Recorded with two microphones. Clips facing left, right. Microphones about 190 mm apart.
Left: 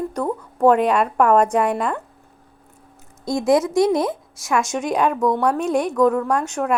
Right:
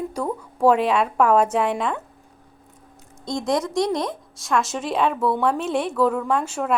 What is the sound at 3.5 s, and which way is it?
A woman's voice, 5° left (ahead or behind).